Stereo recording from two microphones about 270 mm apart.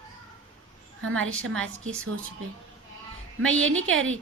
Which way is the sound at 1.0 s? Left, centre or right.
Right.